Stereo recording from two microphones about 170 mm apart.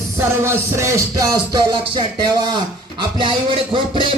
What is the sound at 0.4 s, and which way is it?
Music, 15° right (ahead or behind).